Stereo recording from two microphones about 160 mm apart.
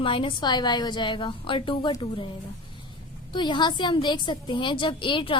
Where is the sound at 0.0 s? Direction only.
35° left (ahead or behind).